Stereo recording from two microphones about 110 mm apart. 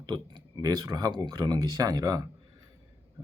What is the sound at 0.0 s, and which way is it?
Speech, 40° right (ahead or behind).